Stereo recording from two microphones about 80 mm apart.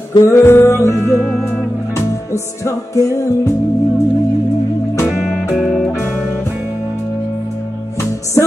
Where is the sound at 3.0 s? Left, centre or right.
Left.